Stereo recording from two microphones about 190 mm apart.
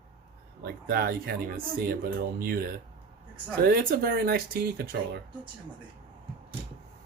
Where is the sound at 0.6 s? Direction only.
55° right (ahead or behind).